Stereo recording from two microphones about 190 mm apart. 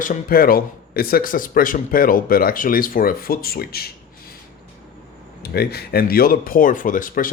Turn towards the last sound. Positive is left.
turn(degrees=45)  # may be behind; listen again after turning